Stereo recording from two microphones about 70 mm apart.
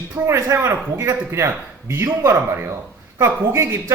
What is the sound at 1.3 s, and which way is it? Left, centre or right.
Speech, right.